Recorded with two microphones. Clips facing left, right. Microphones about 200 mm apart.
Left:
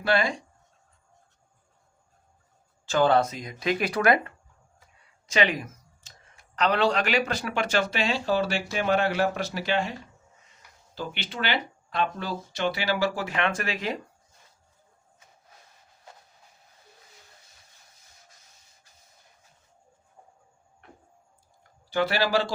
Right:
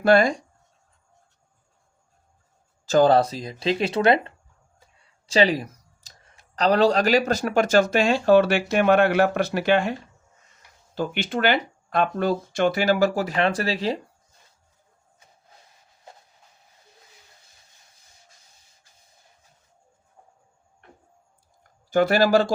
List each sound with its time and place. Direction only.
0.0 s speech: 45° right (ahead or behind)
2.8 s speech: 40° right (ahead or behind)
5.2 s a sound: 35° right (ahead or behind)
6.3 s speech: 35° right (ahead or behind); by 9.9 s 55° right (ahead or behind)
10.9 s speech: 50° right (ahead or behind); by 14.0 s 30° right (ahead or behind)
21.8 s speech: 45° right (ahead or behind)